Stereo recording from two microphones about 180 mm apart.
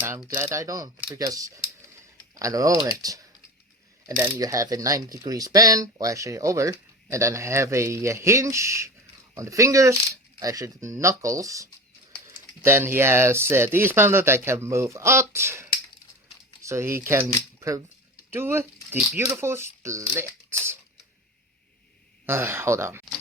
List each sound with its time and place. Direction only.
0.3 s speech: 15° right (ahead or behind)
4.4 s speech: 20° right (ahead or behind)
22.3 s speech: 15° right (ahead or behind)